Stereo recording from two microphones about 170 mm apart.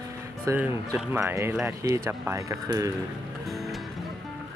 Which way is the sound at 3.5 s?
Centre (ahead or behind).